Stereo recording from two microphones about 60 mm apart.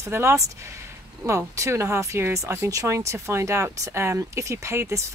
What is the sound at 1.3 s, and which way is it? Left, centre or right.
Speech, right.